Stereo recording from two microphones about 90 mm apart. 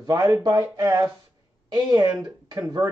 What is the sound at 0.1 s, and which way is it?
Speech, 45° right (ahead or behind).